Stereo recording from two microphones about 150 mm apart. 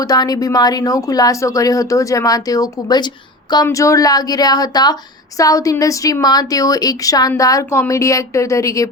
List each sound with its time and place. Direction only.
0.0 s speech: 25° left (ahead or behind)